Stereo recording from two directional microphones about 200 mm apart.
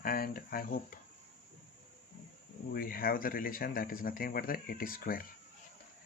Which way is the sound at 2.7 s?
45° left (ahead or behind).